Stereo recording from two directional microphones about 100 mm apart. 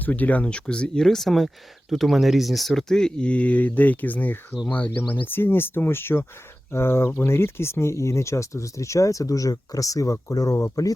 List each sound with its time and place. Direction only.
0.0 s speech: 15° left (ahead or behind); by 10.9 s 35° left (ahead or behind)